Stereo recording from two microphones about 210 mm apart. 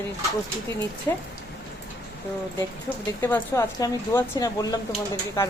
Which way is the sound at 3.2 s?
10° left (ahead or behind).